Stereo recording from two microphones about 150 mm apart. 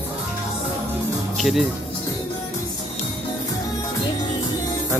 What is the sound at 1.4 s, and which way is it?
Speech, centre (ahead or behind).